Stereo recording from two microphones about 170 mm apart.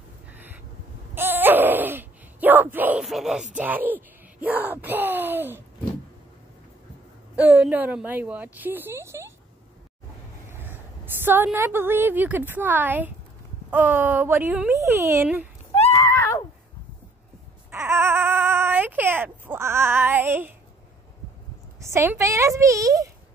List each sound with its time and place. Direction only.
0.3 s a sound: 10° right (ahead or behind)
3.5 s speech: 10° right (ahead or behind)
7.3 s a woman's voice: 10° right (ahead or behind)
10.5 s a woman's voice: 10° right (ahead or behind)
16.0 s a sound: 15° left (ahead or behind)
17.6 s baby cry: 15° right (ahead or behind)
21.7 s a woman's voice: 15° right (ahead or behind)